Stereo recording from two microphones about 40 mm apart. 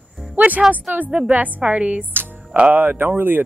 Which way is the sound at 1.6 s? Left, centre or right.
Right.